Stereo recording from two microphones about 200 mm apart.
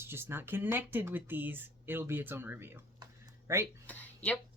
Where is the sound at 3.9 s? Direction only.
5° left (ahead or behind).